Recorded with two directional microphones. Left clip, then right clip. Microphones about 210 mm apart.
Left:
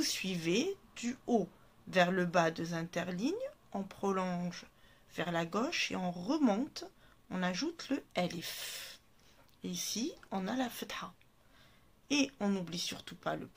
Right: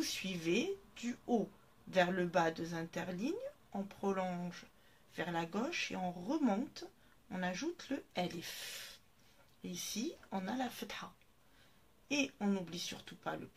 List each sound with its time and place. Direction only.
0.0 s speech: 40° left (ahead or behind)
12.1 s speech: 45° left (ahead or behind)